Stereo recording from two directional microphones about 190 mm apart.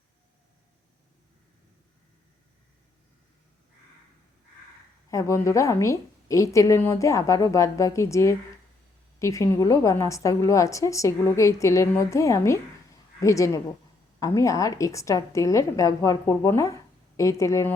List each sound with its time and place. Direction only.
5.1 s a woman's voice: 15° left (ahead or behind)